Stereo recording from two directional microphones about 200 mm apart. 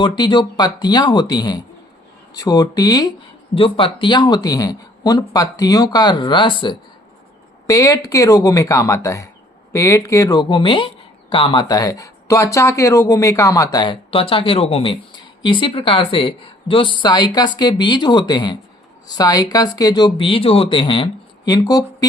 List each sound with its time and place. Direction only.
0.0 s speech: 20° left (ahead or behind)